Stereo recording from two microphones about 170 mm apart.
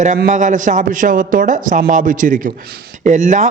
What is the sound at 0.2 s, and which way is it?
Speech, 45° right (ahead or behind).